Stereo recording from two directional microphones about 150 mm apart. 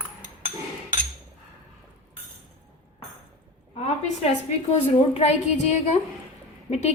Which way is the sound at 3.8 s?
45° left (ahead or behind).